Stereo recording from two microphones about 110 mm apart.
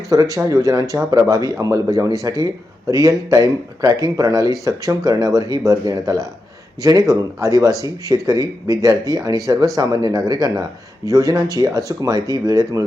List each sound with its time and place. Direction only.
0.1 s speech: 30° right (ahead or behind)
7.4 s speech: 30° right (ahead or behind)